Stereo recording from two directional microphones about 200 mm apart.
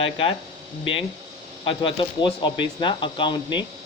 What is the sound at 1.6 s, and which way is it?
Speech, 25° left (ahead or behind).